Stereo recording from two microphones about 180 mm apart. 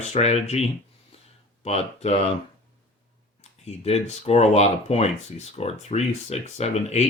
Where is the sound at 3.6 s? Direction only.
35° left (ahead or behind).